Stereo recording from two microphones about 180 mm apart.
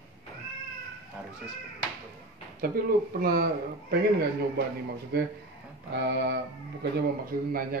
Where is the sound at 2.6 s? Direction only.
55° right (ahead or behind).